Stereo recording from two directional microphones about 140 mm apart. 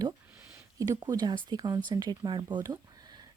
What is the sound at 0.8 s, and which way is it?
Speech, 25° right (ahead or behind).